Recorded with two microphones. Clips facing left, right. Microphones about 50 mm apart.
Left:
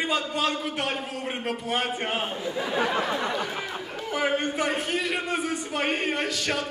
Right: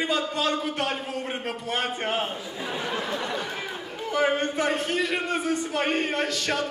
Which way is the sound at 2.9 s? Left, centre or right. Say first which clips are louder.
Left 3 dB; left.